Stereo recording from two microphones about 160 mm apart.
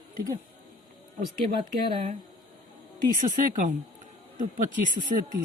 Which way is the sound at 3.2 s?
55° right (ahead or behind).